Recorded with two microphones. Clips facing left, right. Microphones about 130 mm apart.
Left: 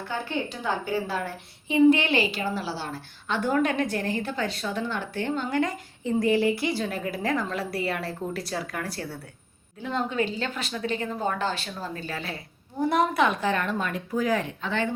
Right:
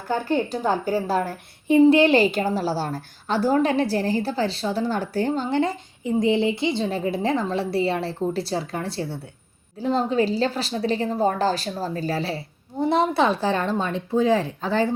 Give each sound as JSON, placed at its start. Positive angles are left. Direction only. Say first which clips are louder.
{"t": 0.1, "sound": "a woman's voice", "louder": "right 9 dB", "side_deg": -40}
{"t": 6.0, "sound": "a woman's voice", "louder": "right 2 dB", "side_deg": -15}